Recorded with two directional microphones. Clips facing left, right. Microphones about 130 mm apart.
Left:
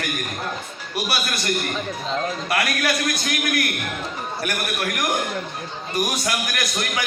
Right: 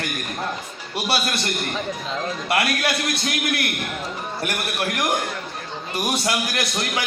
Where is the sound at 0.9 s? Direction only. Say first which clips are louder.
Right 2 dB; 30° right (ahead or behind).